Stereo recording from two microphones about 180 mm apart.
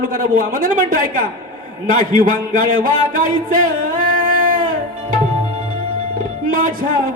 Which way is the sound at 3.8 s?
50° right (ahead or behind).